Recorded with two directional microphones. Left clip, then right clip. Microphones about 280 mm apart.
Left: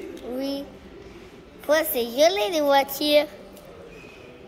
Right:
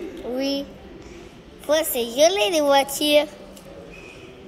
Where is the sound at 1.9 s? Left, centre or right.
Left.